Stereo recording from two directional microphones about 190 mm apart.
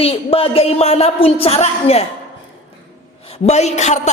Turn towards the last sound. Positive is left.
turn(degrees=40)  # may be behind; listen again after turning